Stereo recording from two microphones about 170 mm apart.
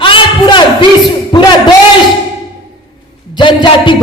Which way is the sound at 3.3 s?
25° left (ahead or behind).